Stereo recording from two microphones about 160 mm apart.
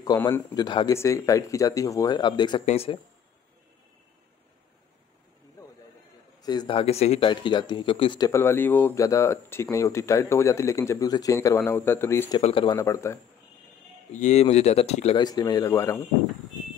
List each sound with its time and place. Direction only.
0.0 s speech: 20° left (ahead or behind)
0.7 s speech: 25° left (ahead or behind)
2.6 s speech: 40° left (ahead or behind)
6.4 s speech: 25° left (ahead or behind)
7.2 s speech: 25° left (ahead or behind)
8.3 s speech: 15° left (ahead or behind)
12.3 s speech: 35° left (ahead or behind)
12.7 s speech: 20° left (ahead or behind)
14.1 s speech: 45° left (ahead or behind)
15.1 s speech: 25° left (ahead or behind)